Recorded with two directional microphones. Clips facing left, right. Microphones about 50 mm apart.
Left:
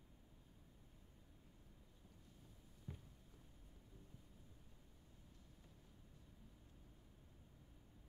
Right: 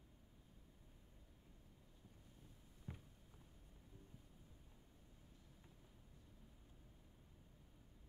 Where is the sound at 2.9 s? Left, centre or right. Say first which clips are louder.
Even; right.